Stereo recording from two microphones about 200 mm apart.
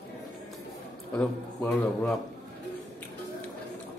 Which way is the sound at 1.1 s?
5° left (ahead or behind).